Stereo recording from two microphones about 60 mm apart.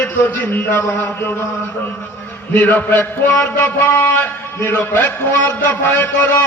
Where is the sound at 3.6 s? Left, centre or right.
Left.